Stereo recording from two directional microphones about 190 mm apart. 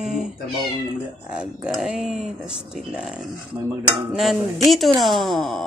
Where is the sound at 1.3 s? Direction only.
5° right (ahead or behind).